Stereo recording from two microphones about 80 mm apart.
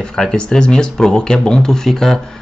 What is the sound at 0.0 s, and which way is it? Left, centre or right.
Speech, centre.